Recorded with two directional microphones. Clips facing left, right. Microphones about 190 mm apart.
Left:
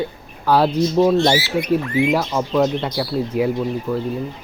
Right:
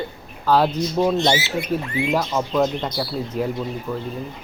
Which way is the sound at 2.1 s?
10° left (ahead or behind).